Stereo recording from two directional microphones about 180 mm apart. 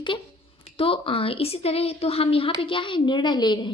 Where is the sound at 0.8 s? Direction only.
30° left (ahead or behind).